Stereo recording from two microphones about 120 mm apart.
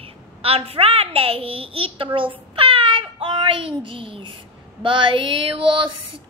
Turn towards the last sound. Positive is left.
turn(degrees=-45)  # may be behind; listen again after turning